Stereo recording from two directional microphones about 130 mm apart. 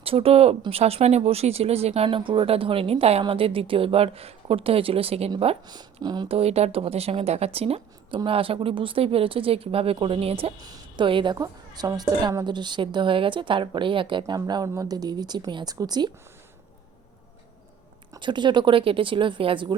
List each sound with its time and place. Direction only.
0.0 s a woman's voice: 45° right (ahead or behind)
2.0 s a woman's voice: 40° right (ahead or behind)
5.6 s a woman's voice: 30° right (ahead or behind)
6.2 s a woman's voice: 50° right (ahead or behind)
10.7 s a woman's voice: 40° right (ahead or behind)
18.1 s a woman's voice: 35° right (ahead or behind)